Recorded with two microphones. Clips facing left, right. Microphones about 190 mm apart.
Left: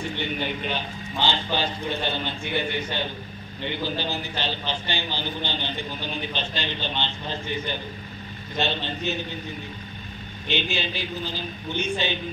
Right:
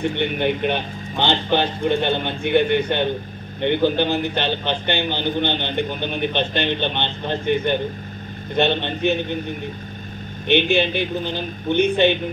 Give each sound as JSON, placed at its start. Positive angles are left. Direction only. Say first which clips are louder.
{"t": 0.0, "sound": "a man's voice", "louder": "right 8 dB", "side_deg": -60}
{"t": 10.5, "sound": "a man's voice", "louder": "right 10 dB", "side_deg": -60}